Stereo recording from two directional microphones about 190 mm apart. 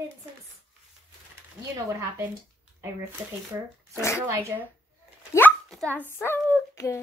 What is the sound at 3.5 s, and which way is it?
Speech, 15° right (ahead or behind).